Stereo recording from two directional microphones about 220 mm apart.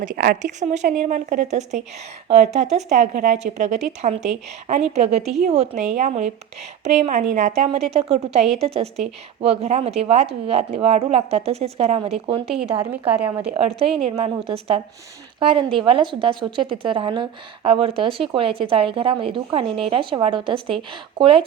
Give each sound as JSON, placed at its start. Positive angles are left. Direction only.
{"t": 0.0, "sound": "a woman's voice", "side_deg": -40}
{"t": 12.8, "sound": "a woman's voice", "side_deg": -10}
{"t": 13.6, "sound": "a woman's voice", "side_deg": -25}